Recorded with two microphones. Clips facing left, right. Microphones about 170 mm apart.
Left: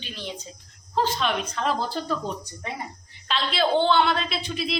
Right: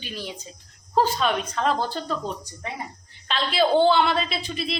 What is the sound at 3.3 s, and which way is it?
A woman's voice, centre (ahead or behind).